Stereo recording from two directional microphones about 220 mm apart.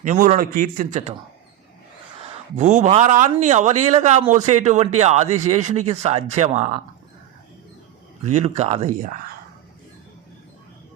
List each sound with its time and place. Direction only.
0.0 s speech: 35° right (ahead or behind)
2.6 s speech: 35° right (ahead or behind)
8.3 s speech: 30° right (ahead or behind)